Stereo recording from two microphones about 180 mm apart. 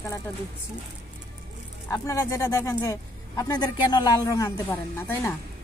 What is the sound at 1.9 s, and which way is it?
Speech, 20° left (ahead or behind).